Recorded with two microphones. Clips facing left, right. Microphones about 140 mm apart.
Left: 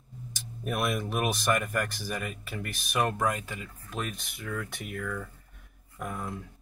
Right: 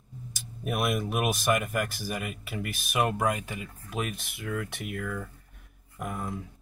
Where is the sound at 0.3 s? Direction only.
5° right (ahead or behind).